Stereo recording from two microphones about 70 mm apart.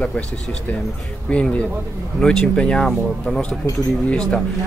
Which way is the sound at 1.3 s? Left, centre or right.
Centre.